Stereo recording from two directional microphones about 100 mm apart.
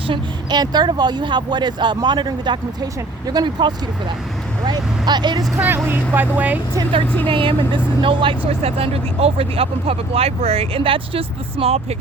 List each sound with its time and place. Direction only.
0.1 s speech: 45° right (ahead or behind)
5.5 s speech: 20° right (ahead or behind)
7.3 s speech: 60° right (ahead or behind)